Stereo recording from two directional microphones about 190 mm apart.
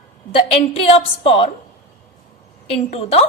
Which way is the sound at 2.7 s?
30° left (ahead or behind).